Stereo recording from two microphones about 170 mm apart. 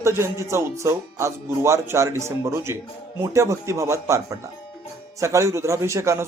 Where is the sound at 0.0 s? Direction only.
15° right (ahead or behind).